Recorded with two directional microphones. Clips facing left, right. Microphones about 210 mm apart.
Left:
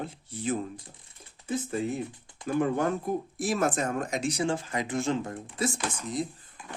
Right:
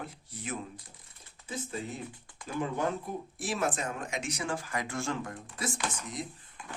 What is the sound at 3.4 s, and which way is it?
Speech, 45° left (ahead or behind).